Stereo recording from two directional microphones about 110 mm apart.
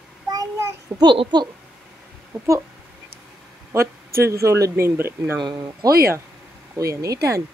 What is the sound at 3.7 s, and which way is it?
Speech, 25° right (ahead or behind).